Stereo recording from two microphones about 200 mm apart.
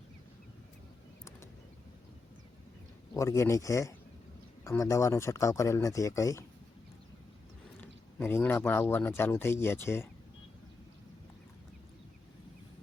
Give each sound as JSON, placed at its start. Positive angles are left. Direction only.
{"t": 3.2, "sound": "speech", "side_deg": 15}
{"t": 7.8, "sound": "speech", "side_deg": 10}